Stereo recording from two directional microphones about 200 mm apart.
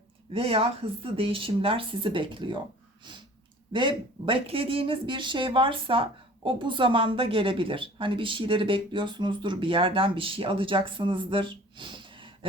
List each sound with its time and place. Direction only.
0.3 s speech: 30° right (ahead or behind)
3.7 s speech: 25° right (ahead or behind)